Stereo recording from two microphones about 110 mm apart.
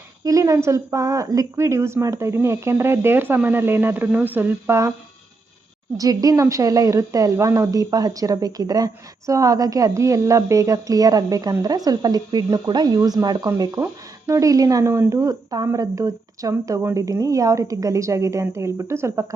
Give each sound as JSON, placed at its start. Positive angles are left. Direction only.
{"t": 0.3, "sound": "a woman's voice", "side_deg": -30}
{"t": 6.0, "sound": "a woman's voice", "side_deg": -35}